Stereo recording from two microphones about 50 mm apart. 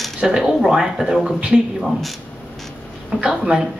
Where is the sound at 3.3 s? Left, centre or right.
Centre.